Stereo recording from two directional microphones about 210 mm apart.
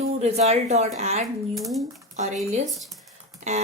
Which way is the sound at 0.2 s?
30° right (ahead or behind).